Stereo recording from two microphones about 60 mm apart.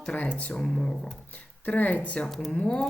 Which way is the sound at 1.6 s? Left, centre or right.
Left.